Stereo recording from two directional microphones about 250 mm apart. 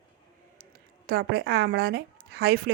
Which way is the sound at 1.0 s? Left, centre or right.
Right.